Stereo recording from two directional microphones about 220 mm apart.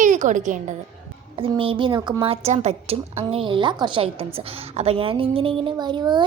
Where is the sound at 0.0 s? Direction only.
35° right (ahead or behind).